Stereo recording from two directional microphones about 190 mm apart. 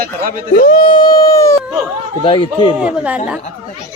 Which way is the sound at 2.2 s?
25° left (ahead or behind).